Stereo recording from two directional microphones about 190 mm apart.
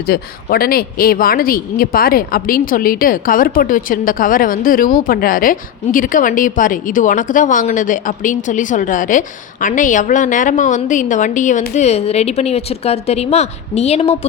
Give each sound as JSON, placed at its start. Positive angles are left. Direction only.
{"t": 0.0, "sound": "speech", "side_deg": 55}